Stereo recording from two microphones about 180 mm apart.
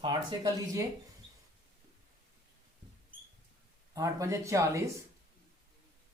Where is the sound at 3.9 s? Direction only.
15° right (ahead or behind).